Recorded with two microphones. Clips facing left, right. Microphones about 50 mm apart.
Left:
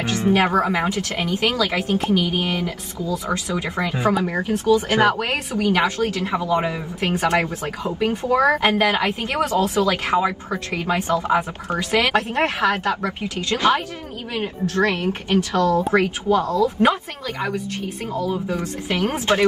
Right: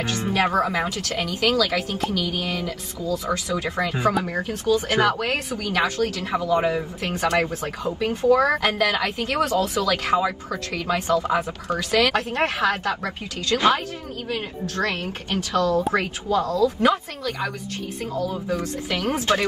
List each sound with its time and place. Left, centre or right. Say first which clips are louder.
0.0 s speech: left 4 dB; left